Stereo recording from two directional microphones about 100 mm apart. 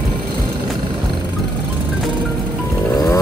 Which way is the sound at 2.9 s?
35° left (ahead or behind).